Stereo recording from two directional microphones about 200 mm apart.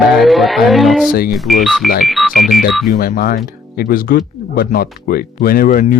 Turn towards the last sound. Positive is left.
turn(degrees=45)  # may be behind; listen again after turning